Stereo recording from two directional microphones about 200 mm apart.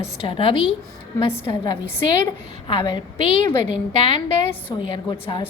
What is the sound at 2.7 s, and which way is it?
A woman's voice, 25° left (ahead or behind).